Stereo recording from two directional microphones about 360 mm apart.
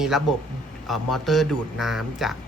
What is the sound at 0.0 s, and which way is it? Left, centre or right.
Speech, centre.